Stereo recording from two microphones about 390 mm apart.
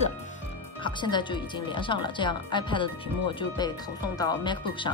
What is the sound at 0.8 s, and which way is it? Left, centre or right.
A woman's voice, centre.